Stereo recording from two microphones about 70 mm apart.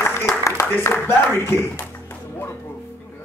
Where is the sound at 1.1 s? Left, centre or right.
Left.